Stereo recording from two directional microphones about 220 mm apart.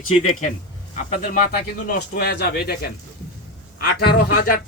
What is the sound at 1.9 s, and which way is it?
Speech, 45° left (ahead or behind).